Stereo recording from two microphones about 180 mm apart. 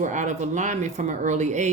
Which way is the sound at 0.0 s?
45° right (ahead or behind).